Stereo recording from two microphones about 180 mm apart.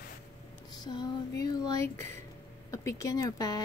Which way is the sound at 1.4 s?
20° left (ahead or behind).